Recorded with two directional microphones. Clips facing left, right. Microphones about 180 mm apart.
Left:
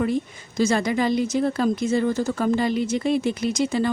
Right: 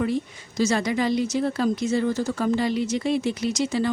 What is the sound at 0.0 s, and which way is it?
Speech, 50° left (ahead or behind).